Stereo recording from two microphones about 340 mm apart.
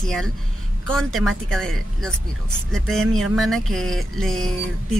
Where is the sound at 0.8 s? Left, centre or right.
Centre.